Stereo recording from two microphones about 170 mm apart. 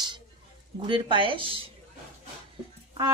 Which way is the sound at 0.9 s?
30° right (ahead or behind).